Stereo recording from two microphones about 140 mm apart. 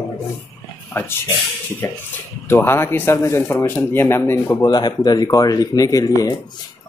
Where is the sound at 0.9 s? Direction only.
15° left (ahead or behind).